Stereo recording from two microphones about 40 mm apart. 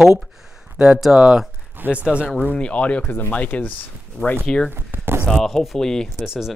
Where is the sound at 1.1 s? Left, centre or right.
Right.